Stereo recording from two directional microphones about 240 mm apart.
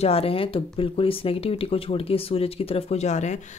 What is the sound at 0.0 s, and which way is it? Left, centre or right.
Speech, left.